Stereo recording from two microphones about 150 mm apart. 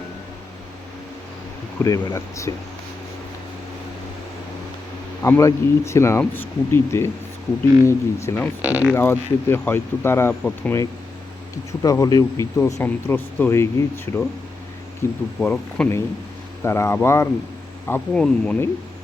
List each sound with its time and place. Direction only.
1.8 s speech: 20° left (ahead or behind)
5.2 s speech: 20° left (ahead or behind)
8.6 s speech: 10° right (ahead or behind)
8.9 s speech: 15° left (ahead or behind)
11.8 s speech: 25° left (ahead or behind); by 18.5 s 5° left (ahead or behind)